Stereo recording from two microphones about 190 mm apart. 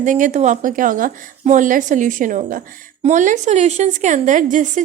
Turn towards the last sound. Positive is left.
turn(degrees=-40)  # may be behind; listen again after turning